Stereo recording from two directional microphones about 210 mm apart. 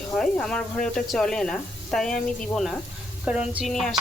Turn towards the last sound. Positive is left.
turn(degrees=0)  # may be behind; listen again after turning